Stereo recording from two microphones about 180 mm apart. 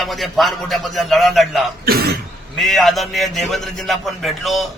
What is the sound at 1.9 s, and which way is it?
Throat clearing, 55° right (ahead or behind).